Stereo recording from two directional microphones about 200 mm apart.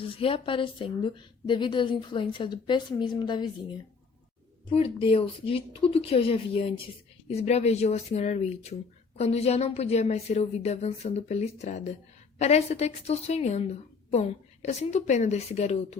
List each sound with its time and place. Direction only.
0.2 s a woman's voice: 25° left (ahead or behind)
4.7 s a woman's voice: 30° left (ahead or behind)